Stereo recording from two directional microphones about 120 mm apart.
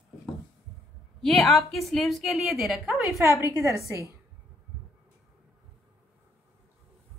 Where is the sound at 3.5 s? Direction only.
25° right (ahead or behind).